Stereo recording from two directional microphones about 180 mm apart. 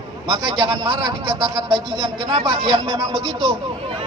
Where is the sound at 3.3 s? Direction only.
25° right (ahead or behind).